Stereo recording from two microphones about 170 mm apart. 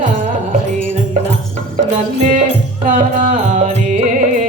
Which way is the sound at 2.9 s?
50° right (ahead or behind).